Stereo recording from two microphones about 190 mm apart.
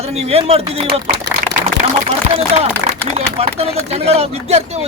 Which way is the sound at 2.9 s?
35° right (ahead or behind).